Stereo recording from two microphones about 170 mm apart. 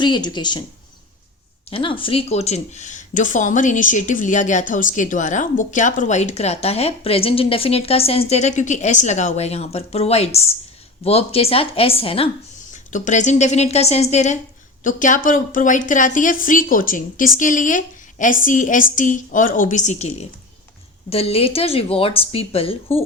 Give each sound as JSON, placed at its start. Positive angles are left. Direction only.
{"t": 0.0, "sound": "speech", "side_deg": 25}
{"t": 1.7, "sound": "speech", "side_deg": 30}
{"t": 12.7, "sound": "a woman's voice", "side_deg": 45}